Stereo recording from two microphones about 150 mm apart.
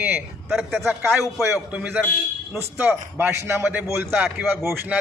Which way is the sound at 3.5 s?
15° right (ahead or behind).